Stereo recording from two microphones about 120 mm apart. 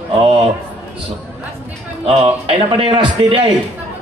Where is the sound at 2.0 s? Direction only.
55° right (ahead or behind).